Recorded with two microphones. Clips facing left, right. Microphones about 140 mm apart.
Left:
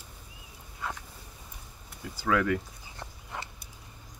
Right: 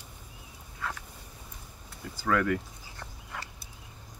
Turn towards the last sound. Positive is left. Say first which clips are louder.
# left 2 dB
turn(degrees=20)  # may be behind; listen again after turning